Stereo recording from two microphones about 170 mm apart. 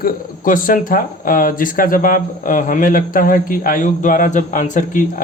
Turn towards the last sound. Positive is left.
turn(degrees=50)  # may be behind; listen again after turning